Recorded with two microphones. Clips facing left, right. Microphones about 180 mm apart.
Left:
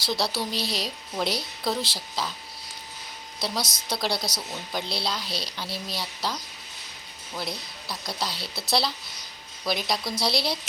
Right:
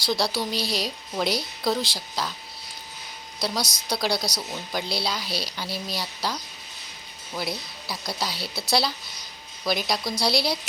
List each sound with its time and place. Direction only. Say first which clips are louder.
0.0 s a woman's voice: right 2 dB; centre (ahead or behind)
3.4 s a woman's voice: right 2 dB; centre (ahead or behind)